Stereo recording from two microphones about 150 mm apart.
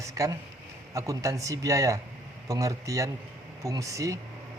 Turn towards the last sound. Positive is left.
turn(degrees=-20)  # may be behind; listen again after turning